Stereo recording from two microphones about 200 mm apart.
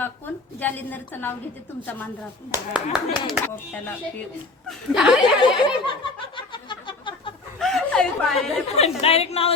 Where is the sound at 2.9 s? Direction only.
20° left (ahead or behind).